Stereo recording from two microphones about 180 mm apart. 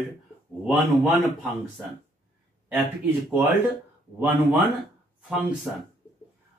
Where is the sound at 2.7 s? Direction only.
10° right (ahead or behind).